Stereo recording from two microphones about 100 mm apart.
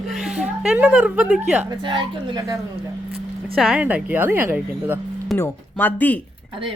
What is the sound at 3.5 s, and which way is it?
Speech, 5° right (ahead or behind).